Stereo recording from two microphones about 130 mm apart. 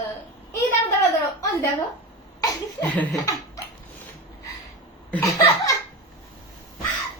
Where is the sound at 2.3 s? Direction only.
30° left (ahead or behind).